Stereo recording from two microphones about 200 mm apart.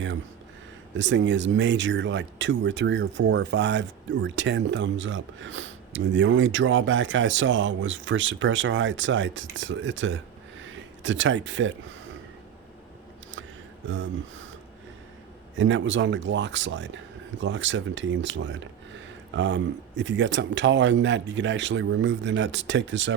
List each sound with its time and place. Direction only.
0.9 s speech: 65° right (ahead or behind)
10.6 s a sound: 70° right (ahead or behind)
13.8 s speech: 70° right (ahead or behind)
15.5 s speech: 70° right (ahead or behind)